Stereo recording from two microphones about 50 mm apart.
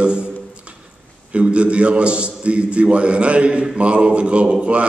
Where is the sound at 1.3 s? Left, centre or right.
Right.